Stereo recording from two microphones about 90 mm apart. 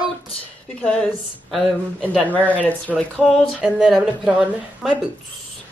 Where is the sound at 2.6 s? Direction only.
15° left (ahead or behind).